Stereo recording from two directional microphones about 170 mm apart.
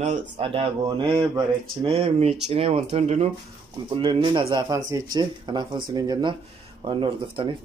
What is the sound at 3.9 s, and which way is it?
Speech, 25° right (ahead or behind).